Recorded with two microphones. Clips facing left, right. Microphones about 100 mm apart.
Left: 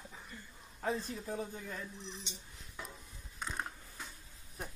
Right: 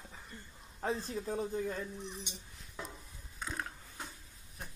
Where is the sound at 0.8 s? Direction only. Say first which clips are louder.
Even; 30° right (ahead or behind).